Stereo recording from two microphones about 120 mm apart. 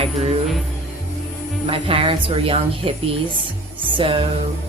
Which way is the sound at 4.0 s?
50° right (ahead or behind).